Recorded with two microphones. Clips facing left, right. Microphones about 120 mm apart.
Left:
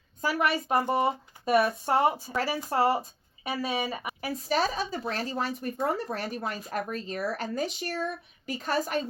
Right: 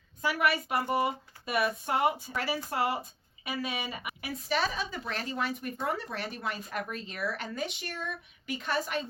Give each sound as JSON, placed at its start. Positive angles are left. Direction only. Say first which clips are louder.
{"t": 0.2, "sound": "speech", "louder": "left 2 dB", "side_deg": 35}